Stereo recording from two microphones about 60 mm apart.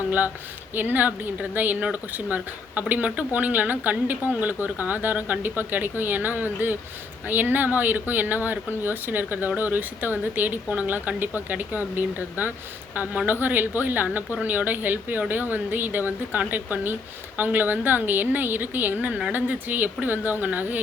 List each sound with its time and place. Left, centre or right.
0.8 s a woman's voice: right